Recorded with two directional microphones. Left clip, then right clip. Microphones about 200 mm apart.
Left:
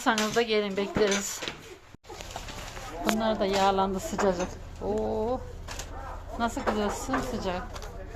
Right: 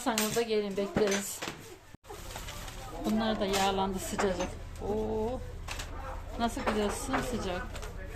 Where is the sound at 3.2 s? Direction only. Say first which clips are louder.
Left 4 dB; 15° left (ahead or behind).